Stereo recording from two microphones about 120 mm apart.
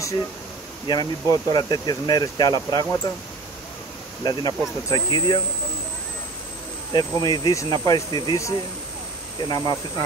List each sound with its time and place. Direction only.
0.8 s speech: 35° left (ahead or behind)
4.2 s speech: 35° left (ahead or behind)
6.9 s speech: 35° left (ahead or behind)